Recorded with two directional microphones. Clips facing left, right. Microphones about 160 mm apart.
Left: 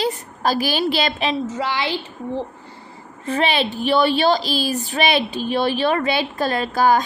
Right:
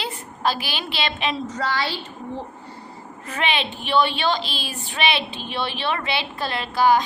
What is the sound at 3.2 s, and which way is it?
A woman's voice, 35° left (ahead or behind).